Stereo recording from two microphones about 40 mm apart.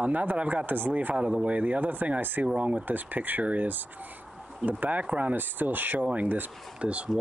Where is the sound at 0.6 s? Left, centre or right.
Right.